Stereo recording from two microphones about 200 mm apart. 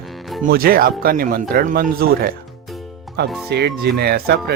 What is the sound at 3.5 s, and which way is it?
Speech, 55° right (ahead or behind).